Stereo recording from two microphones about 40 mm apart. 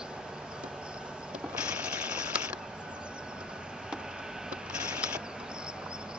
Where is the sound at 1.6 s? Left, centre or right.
Right.